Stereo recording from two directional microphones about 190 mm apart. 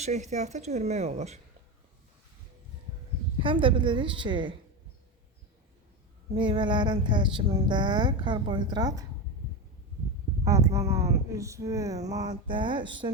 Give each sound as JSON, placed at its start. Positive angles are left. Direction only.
{"t": 0.0, "sound": "speech", "side_deg": -35}
{"t": 3.4, "sound": "a woman's voice", "side_deg": -25}
{"t": 6.3, "sound": "a woman's voice", "side_deg": -25}
{"t": 10.4, "sound": "a woman's voice", "side_deg": -15}